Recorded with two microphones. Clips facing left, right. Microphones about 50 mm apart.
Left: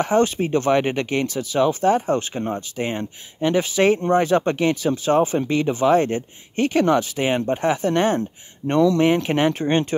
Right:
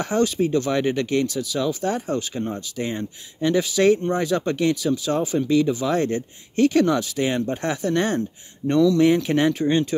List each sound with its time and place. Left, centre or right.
0.0 s speech: left